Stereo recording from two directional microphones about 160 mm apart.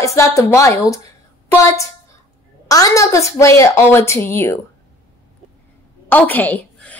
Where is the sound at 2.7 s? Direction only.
20° left (ahead or behind).